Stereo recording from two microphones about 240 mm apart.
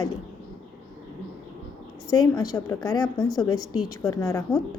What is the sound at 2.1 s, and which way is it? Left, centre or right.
Speech, centre.